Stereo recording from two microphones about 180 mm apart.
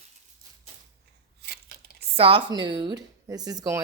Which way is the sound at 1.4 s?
65° right (ahead or behind).